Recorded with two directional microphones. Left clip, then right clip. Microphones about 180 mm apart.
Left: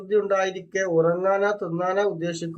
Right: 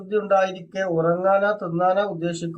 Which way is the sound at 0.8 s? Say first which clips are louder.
Even; 25° left (ahead or behind).